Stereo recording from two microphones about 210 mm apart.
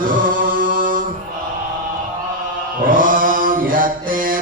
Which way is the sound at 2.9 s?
40° right (ahead or behind).